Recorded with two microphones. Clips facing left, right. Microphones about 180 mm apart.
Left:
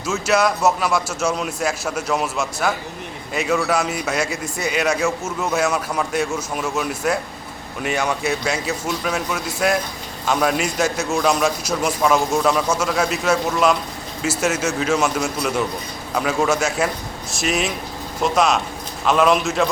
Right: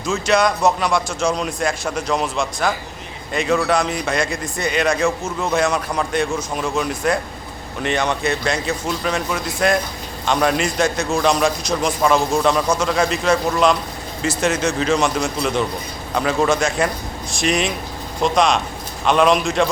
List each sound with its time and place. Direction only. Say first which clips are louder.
0.0 s a man's voice: right 1 dB; 5° left (ahead or behind)